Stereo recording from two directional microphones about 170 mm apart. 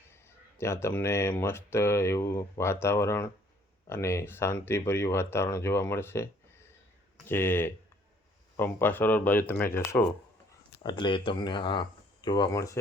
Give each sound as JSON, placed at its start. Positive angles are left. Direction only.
{"t": 0.6, "sound": "speech", "side_deg": 15}
{"t": 7.3, "sound": "speech", "side_deg": 15}
{"t": 10.8, "sound": "speech", "side_deg": 30}